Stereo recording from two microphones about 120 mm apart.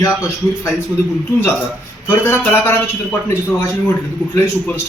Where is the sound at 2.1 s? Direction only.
20° left (ahead or behind).